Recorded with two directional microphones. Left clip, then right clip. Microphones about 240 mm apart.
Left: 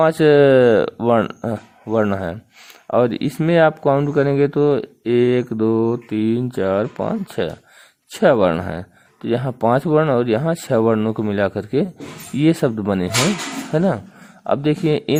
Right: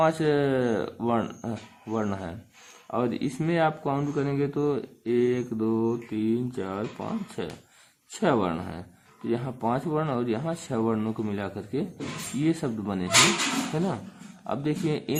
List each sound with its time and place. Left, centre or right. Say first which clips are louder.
0.0 s speech: left 11 dB; left